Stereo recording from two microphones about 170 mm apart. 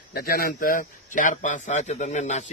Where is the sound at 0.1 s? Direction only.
60° left (ahead or behind).